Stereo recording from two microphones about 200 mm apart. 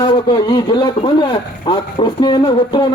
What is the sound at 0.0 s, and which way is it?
A man's voice, 25° left (ahead or behind).